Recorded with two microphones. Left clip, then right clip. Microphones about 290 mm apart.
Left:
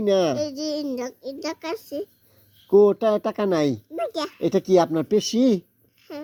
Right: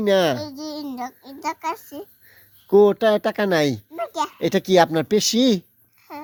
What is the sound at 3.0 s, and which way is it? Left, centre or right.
Speech, right.